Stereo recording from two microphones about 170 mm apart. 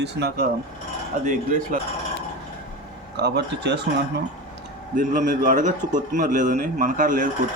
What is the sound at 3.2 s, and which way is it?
Speech, 80° right.